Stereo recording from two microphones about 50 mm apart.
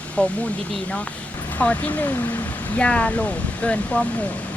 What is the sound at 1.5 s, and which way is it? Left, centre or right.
Speech, left.